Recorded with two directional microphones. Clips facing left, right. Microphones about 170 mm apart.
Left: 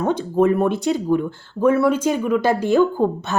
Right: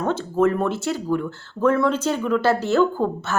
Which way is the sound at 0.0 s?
15° left (ahead or behind).